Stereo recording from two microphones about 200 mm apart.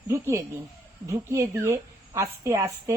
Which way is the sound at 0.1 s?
15° right (ahead or behind).